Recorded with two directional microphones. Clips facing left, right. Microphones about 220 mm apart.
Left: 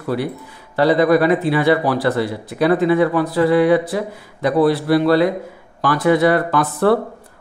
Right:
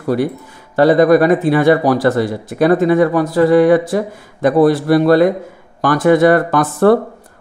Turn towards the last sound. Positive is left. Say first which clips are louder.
# right 5 dB
turn(degrees=-45)  # may be behind; listen again after turning